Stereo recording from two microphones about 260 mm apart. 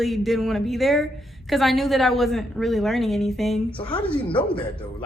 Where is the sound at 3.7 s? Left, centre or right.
Centre.